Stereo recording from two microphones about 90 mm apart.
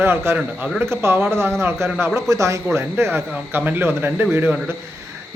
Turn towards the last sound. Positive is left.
turn(degrees=-25)  # may be behind; listen again after turning